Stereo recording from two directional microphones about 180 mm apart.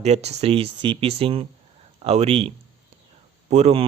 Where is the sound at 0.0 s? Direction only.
40° right (ahead or behind).